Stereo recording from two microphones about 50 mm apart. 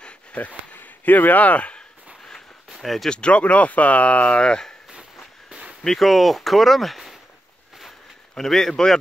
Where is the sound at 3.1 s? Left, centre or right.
Left.